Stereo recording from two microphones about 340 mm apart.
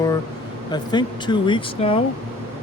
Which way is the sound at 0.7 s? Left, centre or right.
Centre.